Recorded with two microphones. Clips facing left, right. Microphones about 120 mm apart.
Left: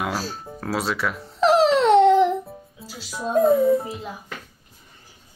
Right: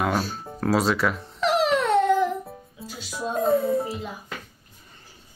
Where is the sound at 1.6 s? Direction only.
30° left (ahead or behind).